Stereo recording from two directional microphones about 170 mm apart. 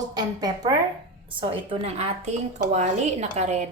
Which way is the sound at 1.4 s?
35° right (ahead or behind).